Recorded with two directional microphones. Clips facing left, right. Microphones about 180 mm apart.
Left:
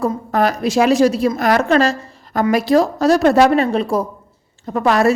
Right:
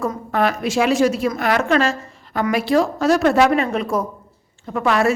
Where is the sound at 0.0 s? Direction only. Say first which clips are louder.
Left 3 dB; 35° left (ahead or behind).